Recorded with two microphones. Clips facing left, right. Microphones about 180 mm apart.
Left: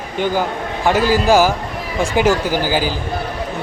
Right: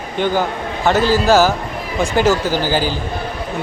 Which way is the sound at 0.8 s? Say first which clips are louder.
Even; 10° left (ahead or behind).